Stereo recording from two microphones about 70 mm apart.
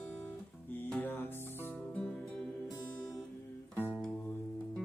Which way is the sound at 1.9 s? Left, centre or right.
Centre.